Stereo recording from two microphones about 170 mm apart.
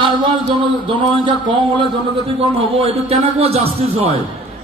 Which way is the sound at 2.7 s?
35° right (ahead or behind).